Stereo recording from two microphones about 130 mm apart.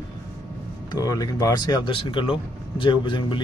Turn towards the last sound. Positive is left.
turn(degrees=40)  # may be behind; listen again after turning